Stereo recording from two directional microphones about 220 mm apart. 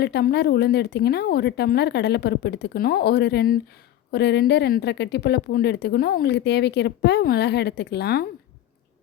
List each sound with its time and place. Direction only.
0.0 s a woman's voice: 45° left (ahead or behind)